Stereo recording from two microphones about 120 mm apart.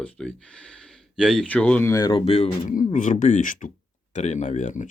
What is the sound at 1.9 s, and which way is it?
Speech, 30° left (ahead or behind).